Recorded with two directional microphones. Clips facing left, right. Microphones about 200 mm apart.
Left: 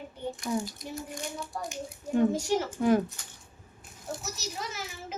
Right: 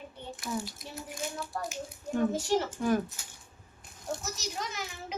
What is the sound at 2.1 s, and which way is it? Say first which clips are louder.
Speech: left 2 dB; 10° left (ahead or behind).